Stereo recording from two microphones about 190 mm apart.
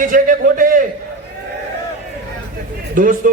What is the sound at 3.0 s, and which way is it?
Speech, 45° right (ahead or behind).